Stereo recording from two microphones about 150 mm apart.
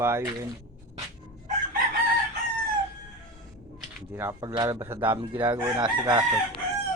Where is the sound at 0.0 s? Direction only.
15° right (ahead or behind).